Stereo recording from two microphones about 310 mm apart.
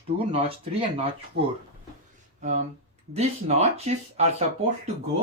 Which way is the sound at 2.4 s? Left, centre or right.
Right.